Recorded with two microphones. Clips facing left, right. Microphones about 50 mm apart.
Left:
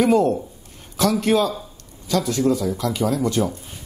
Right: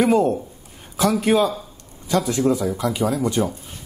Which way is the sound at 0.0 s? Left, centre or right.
Centre.